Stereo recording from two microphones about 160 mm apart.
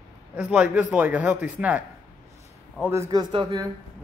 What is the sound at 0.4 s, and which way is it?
A man's voice, 5° right (ahead or behind).